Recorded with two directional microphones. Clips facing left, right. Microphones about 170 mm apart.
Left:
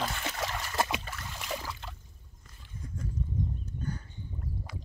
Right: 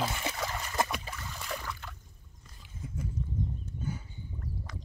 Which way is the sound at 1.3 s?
15° left (ahead or behind).